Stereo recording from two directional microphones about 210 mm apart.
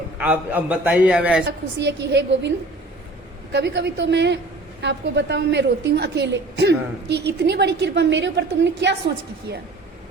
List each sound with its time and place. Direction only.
0.2 s a man's voice: 5° right (ahead or behind)
1.5 s a woman's voice: 55° right (ahead or behind)
3.5 s a woman's voice: 55° right (ahead or behind)